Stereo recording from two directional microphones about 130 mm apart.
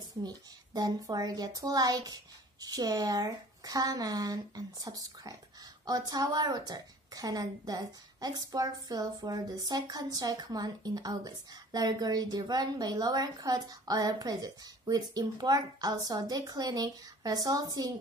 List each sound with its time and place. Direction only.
0.2 s a woman's voice: 30° right (ahead or behind)